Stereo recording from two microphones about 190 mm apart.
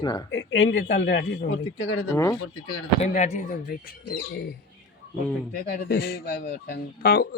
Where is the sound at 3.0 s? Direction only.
35° left (ahead or behind); by 4.5 s 55° left (ahead or behind).